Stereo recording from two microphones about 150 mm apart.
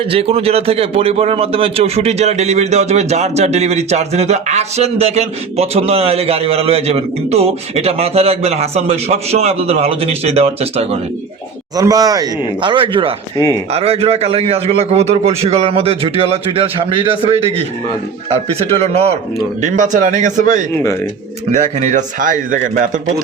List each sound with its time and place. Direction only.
0.1 s a man's voice: 40° right (ahead or behind)
11.8 s a man's voice: 25° right (ahead or behind); by 19.1 s 45° right (ahead or behind)
19.6 s a man's voice: 60° right (ahead or behind)